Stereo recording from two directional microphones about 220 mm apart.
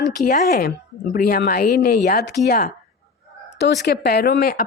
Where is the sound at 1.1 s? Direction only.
40° left (ahead or behind).